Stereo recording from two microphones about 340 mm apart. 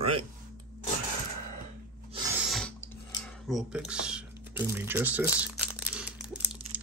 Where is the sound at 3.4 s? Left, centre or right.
Centre.